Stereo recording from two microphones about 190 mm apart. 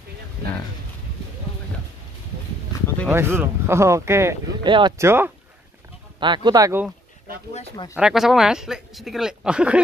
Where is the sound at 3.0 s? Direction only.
10° right (ahead or behind).